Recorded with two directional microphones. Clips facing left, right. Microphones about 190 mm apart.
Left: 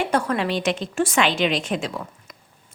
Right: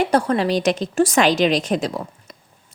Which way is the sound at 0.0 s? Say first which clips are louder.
Right 4 dB; 35° right (ahead or behind).